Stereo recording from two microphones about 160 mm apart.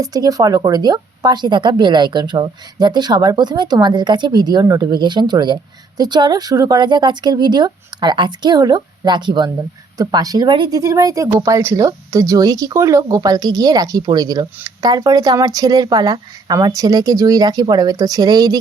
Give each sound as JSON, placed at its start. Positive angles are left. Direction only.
{"t": 0.0, "sound": "speech", "side_deg": -25}